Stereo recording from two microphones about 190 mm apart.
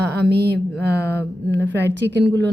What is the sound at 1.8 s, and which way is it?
Speech, 65° right (ahead or behind).